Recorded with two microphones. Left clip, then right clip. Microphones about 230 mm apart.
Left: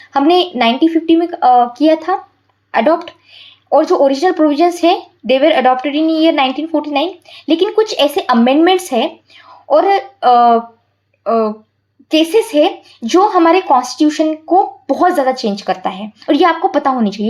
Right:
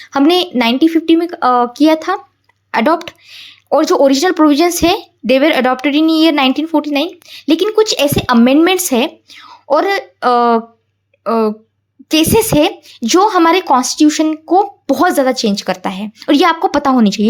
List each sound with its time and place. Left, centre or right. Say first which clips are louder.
0.0 s speech: left 1 dB; right